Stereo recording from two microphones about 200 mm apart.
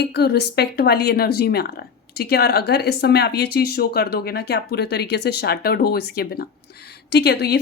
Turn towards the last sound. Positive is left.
turn(degrees=55)  # may be behind; listen again after turning